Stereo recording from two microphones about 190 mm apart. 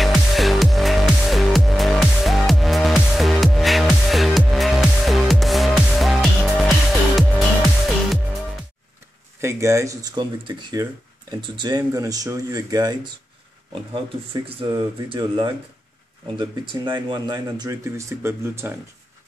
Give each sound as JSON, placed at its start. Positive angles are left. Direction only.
{"t": 0.0, "sound": "music", "side_deg": 0}
{"t": 9.4, "sound": "speech", "side_deg": -15}
{"t": 14.3, "sound": "speech", "side_deg": -25}